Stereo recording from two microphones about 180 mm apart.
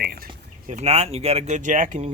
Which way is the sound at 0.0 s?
60° right (ahead or behind).